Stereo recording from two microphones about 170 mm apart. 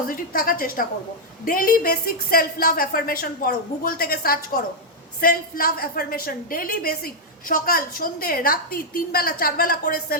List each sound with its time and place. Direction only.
0.1 s a woman's voice: 55° left (ahead or behind)